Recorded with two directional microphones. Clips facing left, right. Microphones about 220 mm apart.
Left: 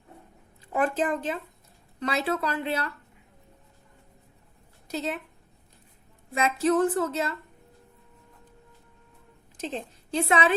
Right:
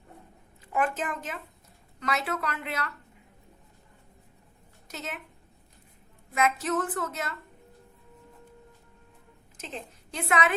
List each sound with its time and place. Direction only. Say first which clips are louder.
0.7 s speech: left 4 dB; 30° left (ahead or behind)
4.9 s speech: left 8 dB; 30° left (ahead or behind)
6.3 s speech: left 4 dB; 30° left (ahead or behind)
9.6 s a woman's voice: left 6 dB; 30° left (ahead or behind)